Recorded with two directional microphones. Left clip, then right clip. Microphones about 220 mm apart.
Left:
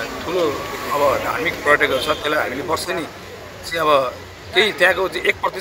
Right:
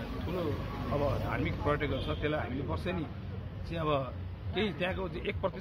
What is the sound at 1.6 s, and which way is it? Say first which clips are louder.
Speech: left 18 dB; 15° left (ahead or behind).